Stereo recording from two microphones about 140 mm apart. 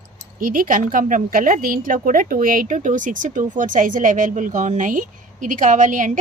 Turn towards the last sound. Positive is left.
turn(degrees=-65)  # may be behind; listen again after turning